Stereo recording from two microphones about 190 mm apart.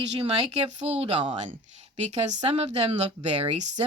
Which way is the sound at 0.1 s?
35° right (ahead or behind).